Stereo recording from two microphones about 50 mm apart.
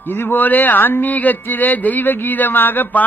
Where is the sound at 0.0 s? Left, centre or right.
Left.